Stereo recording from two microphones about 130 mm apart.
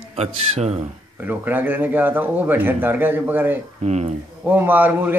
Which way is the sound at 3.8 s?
65° right (ahead or behind).